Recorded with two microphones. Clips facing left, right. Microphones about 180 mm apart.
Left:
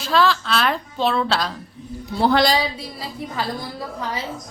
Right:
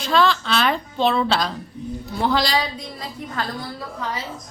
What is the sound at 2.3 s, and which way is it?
Speech, 55° left (ahead or behind).